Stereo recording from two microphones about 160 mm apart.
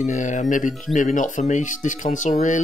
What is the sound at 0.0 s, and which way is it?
Speech, 50° left (ahead or behind).